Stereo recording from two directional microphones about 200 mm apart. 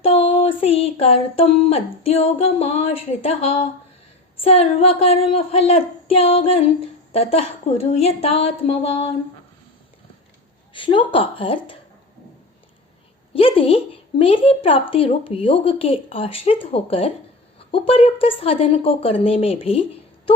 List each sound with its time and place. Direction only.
0.0 s a sound: 30° left (ahead or behind)
4.4 s a woman's voice: 30° left (ahead or behind)
10.8 s a woman's voice: 25° left (ahead or behind)
13.3 s a woman's voice: 30° left (ahead or behind)